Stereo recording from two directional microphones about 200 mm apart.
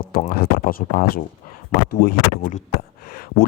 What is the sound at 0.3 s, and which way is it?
Speech, 50° left (ahead or behind).